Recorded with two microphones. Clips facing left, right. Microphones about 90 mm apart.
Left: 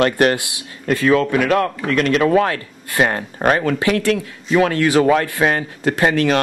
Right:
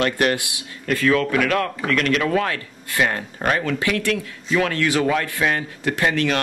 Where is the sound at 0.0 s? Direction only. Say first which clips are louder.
Left 5 dB; 40° left (ahead or behind).